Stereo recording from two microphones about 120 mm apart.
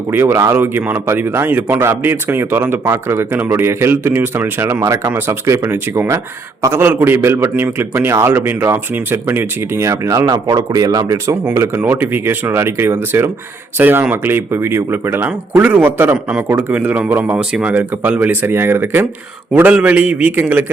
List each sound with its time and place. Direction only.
0.1 s a man's voice: 20° right (ahead or behind)
11.4 s a man's voice: 15° right (ahead or behind)